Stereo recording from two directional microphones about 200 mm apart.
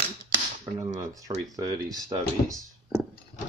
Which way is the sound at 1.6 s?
20° right (ahead or behind).